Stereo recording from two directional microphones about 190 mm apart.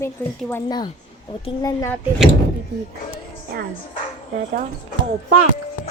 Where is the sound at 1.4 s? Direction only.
15° left (ahead or behind).